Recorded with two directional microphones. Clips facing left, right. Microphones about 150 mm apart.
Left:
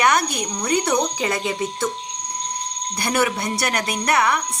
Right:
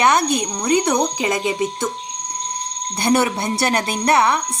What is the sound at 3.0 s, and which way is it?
Speech, 30° right (ahead or behind).